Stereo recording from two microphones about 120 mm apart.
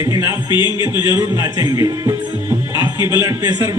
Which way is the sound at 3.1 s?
25° right (ahead or behind).